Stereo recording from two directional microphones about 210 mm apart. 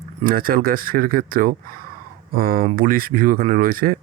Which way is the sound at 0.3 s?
45° right (ahead or behind).